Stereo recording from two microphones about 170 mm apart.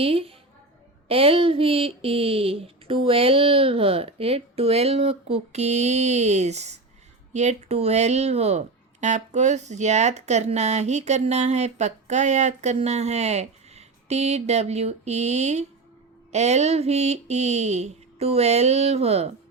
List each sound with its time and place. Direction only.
0.0 s speech: 35° right (ahead or behind)